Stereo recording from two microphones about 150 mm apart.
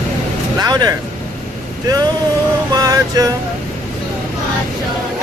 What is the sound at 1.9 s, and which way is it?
Speech, 25° right (ahead or behind).